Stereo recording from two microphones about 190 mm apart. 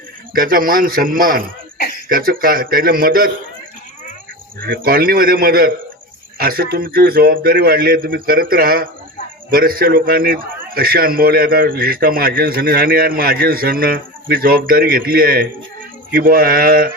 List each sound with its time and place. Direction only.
0.3 s a man's voice: 50° right (ahead or behind)
4.6 s a man's voice: 50° right (ahead or behind)